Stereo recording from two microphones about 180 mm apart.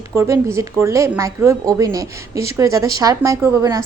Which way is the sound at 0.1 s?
15° right (ahead or behind).